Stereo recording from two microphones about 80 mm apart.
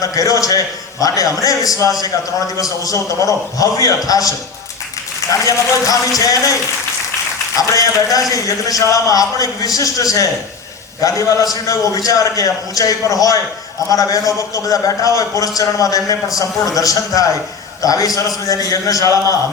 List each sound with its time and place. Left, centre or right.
0.0 s a man's voice: left
5.5 s a man's voice: left
7.7 s a man's voice: left